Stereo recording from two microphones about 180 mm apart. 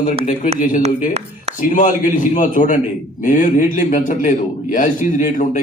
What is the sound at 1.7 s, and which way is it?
A man's voice, 45° left (ahead or behind).